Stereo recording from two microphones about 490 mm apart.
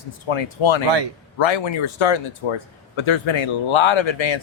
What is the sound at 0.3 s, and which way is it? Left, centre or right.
Speech, left.